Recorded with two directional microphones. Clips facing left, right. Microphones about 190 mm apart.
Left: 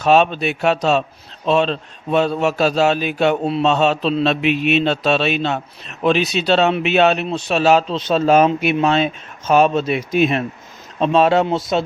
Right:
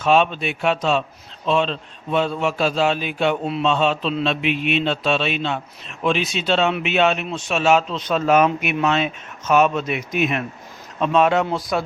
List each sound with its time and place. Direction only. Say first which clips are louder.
0.0 s a man's voice: left 3 dB; 40° left (ahead or behind); by 11.9 s 25° left (ahead or behind)